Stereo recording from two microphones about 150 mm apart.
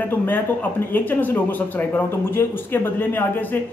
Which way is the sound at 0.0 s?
15° left (ahead or behind).